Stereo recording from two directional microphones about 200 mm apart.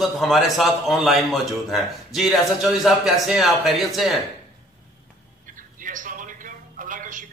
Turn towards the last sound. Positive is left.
turn(degrees=-40)  # may be behind; listen again after turning